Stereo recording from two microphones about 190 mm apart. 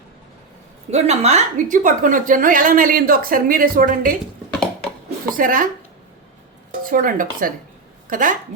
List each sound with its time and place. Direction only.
0.9 s a woman's voice: 35° right (ahead or behind)
5.3 s a woman's voice: 45° right (ahead or behind)
6.8 s a woman's voice: 45° right (ahead or behind)